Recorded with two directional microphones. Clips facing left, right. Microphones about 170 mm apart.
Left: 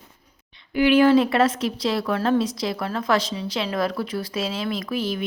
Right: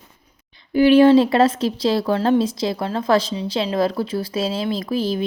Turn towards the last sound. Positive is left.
turn(degrees=-30)  # may be behind; listen again after turning